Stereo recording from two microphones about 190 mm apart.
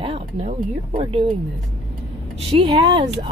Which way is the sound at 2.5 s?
30° right (ahead or behind).